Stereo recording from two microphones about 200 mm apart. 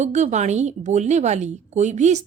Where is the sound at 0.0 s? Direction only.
35° right (ahead or behind).